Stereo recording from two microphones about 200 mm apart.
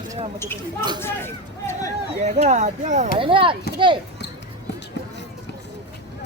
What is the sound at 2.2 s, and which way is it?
Speech, 35° right (ahead or behind).